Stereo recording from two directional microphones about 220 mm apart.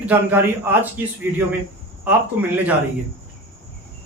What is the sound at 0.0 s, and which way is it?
A man's voice, 10° right (ahead or behind).